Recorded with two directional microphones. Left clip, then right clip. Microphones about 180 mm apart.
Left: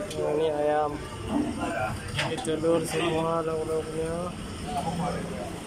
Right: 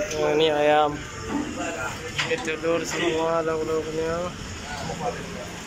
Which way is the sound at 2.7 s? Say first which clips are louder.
Even; 15° left (ahead or behind).